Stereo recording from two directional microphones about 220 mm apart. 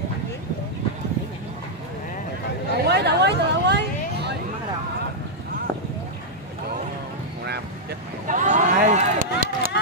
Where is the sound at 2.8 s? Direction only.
50° right (ahead or behind).